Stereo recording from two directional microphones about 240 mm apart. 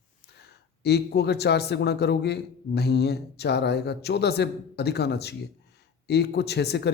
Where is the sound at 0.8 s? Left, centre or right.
Left.